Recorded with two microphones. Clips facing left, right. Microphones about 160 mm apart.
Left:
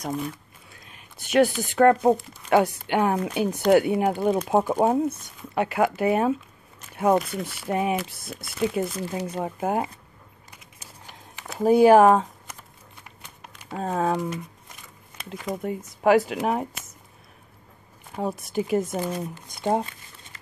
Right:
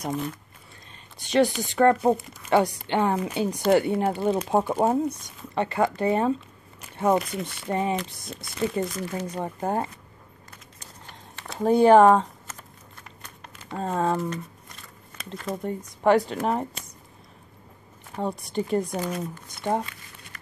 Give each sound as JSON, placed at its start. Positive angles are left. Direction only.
{"t": 0.0, "sound": "speech", "side_deg": 0}
{"t": 11.1, "sound": "a sound", "side_deg": 5}
{"t": 13.4, "sound": "speech", "side_deg": 10}
{"t": 18.1, "sound": "speech", "side_deg": 5}
{"t": 19.5, "sound": "speech", "side_deg": 20}